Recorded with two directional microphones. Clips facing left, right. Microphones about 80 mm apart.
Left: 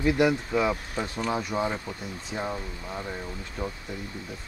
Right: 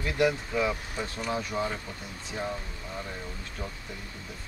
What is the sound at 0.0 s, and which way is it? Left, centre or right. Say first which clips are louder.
Speech: left 4 dB; centre.